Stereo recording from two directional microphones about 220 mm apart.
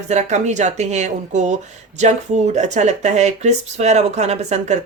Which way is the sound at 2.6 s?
30° right (ahead or behind).